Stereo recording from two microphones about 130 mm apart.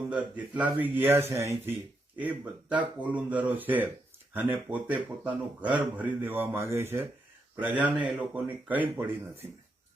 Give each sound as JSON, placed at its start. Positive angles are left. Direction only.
{"t": 0.1, "sound": "speech", "side_deg": -10}